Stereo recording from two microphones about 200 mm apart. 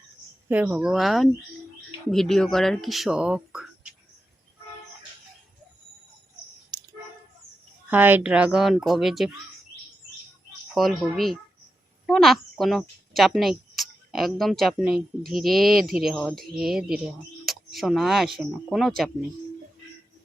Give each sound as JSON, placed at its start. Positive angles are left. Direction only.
{"t": 0.4, "sound": "speech", "side_deg": -10}
{"t": 6.7, "sound": "a sound", "side_deg": -20}
{"t": 7.9, "sound": "speech", "side_deg": -10}
{"t": 10.8, "sound": "a child's voice", "side_deg": 0}